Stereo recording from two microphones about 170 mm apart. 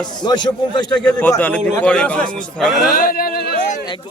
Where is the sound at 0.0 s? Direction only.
25° left (ahead or behind).